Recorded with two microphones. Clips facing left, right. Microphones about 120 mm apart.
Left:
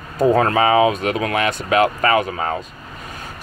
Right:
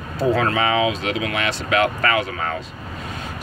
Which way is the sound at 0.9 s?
45° left (ahead or behind).